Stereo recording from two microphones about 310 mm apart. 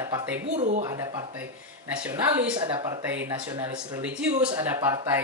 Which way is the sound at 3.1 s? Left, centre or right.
Centre.